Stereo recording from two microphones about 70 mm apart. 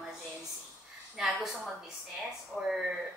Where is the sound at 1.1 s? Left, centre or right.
Centre.